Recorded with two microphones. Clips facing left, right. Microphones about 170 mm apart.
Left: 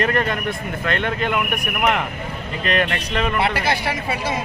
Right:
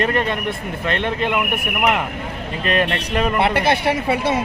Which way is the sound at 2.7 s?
35° right (ahead or behind).